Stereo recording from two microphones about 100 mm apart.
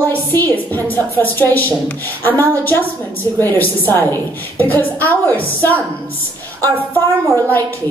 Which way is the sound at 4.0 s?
20° left (ahead or behind).